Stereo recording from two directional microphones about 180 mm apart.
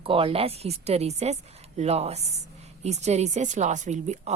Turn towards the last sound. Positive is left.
turn(degrees=-40)  # may be behind; listen again after turning